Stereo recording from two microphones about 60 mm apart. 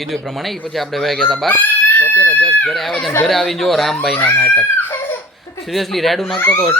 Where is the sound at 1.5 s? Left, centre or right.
Left.